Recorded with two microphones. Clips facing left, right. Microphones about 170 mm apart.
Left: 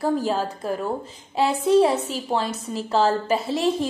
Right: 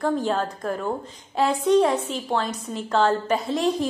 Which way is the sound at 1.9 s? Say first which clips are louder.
Left 1 dB; 35° left (ahead or behind).